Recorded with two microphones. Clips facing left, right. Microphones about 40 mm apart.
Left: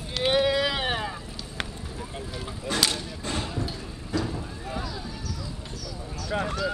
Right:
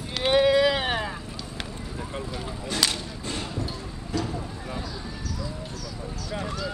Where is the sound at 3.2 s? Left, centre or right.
Left.